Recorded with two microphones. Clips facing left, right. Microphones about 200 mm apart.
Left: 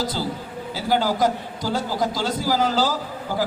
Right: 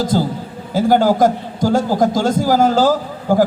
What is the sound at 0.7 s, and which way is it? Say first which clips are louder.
A man's voice: right 9 dB; 50° right (ahead or behind).